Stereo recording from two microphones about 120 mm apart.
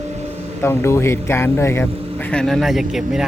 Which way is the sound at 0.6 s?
20° left (ahead or behind).